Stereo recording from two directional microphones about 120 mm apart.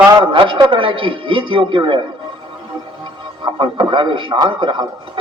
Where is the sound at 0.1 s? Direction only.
40° right (ahead or behind).